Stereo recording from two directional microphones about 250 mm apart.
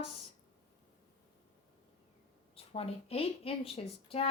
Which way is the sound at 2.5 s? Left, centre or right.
Left.